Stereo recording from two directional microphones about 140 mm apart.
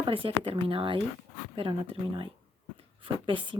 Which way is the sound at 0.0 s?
40° right (ahead or behind).